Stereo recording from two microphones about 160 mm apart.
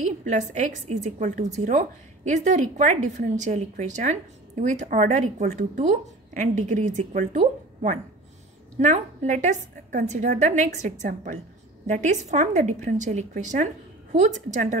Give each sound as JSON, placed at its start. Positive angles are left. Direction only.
{"t": 0.0, "sound": "a woman's voice", "side_deg": -50}